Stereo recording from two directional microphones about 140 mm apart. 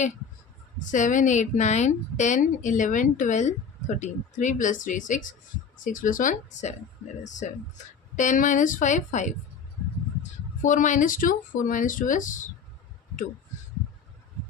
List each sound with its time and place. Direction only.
0.8 s a woman's voice: 60° left (ahead or behind)